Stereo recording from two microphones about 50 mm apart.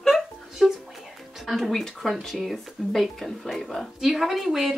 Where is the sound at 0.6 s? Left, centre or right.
Centre.